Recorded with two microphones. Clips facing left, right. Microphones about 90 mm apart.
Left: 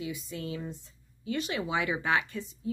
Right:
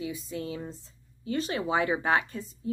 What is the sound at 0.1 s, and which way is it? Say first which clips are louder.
Speech: right 2 dB; 35° right (ahead or behind).